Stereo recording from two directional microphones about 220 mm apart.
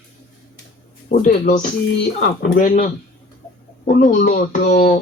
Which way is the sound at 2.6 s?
40° left (ahead or behind).